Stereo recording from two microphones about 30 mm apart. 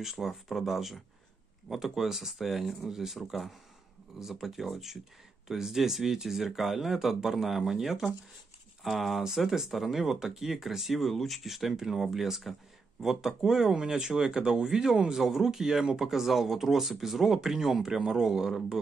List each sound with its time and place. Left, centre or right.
0.0 s speech: centre
13.0 s speech: centre
16.1 s speech: centre